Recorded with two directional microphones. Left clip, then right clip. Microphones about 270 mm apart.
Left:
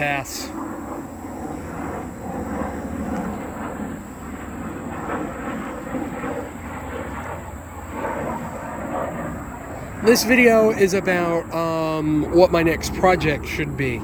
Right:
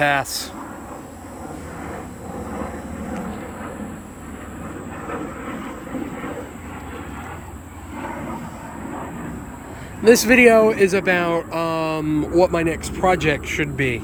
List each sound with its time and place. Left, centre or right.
0.0 s speech: centre
5.0 s train: left
10.0 s speech: centre